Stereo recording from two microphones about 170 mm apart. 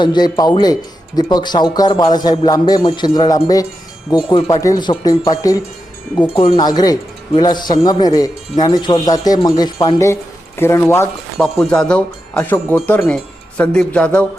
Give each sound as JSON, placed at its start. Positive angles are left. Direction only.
{"t": 0.0, "sound": "speech", "side_deg": 25}
{"t": 6.2, "sound": "wind chime", "side_deg": 35}
{"t": 6.7, "sound": "speech", "side_deg": 20}
{"t": 11.3, "sound": "speech", "side_deg": 0}